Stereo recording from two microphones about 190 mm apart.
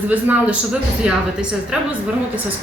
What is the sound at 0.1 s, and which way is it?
Speech, 10° right (ahead or behind).